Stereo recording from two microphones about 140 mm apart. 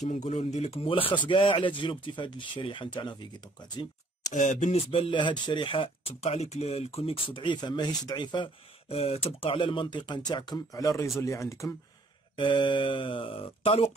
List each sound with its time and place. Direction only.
0.0 s speech: 55° left (ahead or behind); by 3.3 s 35° left (ahead or behind)
4.3 s speech: 60° left (ahead or behind); by 8.5 s 35° left (ahead or behind)
8.8 s speech: 45° left (ahead or behind); by 11.7 s 20° left (ahead or behind)
12.4 s speech: 35° left (ahead or behind)